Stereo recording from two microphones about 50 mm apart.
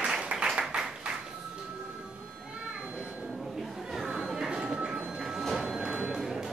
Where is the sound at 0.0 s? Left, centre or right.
Centre.